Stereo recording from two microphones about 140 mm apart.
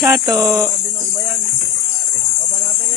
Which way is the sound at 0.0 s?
20° right (ahead or behind).